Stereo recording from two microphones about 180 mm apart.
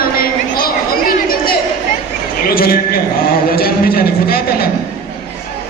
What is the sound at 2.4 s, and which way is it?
A man's voice, 55° left (ahead or behind).